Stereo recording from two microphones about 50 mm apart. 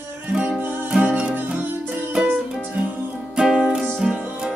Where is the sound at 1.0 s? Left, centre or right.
Right.